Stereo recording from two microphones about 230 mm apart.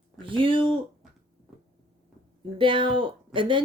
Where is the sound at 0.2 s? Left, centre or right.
Right.